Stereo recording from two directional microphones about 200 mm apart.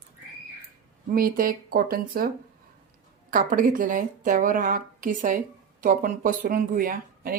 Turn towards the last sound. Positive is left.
turn(degrees=-45)  # may be behind; listen again after turning